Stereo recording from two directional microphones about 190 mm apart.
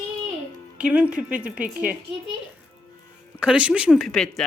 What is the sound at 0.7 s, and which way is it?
A woman's voice, 5° right (ahead or behind).